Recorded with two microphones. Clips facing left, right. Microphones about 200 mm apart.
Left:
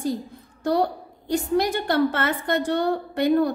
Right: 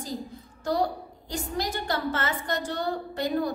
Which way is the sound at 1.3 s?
60° left (ahead or behind).